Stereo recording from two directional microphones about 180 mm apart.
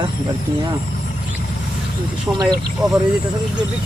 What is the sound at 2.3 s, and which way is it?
Speech, 20° right (ahead or behind).